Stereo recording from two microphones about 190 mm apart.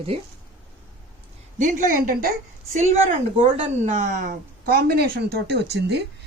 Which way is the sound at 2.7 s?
30° right (ahead or behind).